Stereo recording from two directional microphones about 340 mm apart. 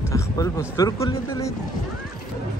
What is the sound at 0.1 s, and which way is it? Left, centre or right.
Speech, centre.